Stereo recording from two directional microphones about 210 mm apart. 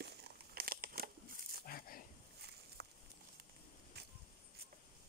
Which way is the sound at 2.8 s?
50° right (ahead or behind).